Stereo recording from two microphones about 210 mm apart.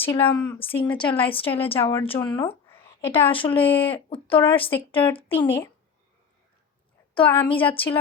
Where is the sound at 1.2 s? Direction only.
25° left (ahead or behind).